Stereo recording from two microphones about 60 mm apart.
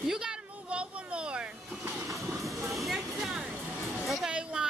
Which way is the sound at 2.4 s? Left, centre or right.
Centre.